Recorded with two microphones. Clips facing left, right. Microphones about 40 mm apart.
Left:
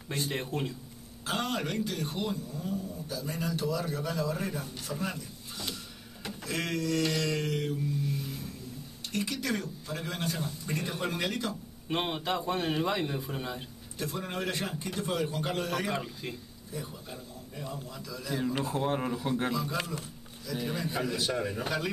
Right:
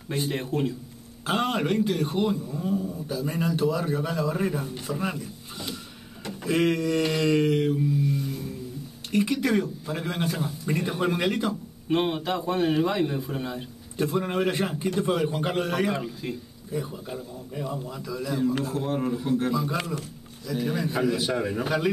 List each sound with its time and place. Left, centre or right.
0.1 s a man's voice: centre
1.2 s a man's voice: right
8.0 s music: centre
9.1 s speech: centre
11.9 s a man's voice: centre
14.0 s speech: centre
15.9 s a man's voice: centre
16.7 s speech: centre
18.4 s a man's voice: centre
19.5 s speech: centre